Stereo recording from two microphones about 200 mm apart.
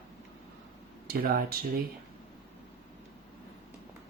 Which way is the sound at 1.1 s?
50° right (ahead or behind).